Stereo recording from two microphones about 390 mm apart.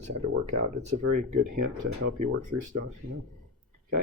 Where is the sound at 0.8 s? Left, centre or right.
Right.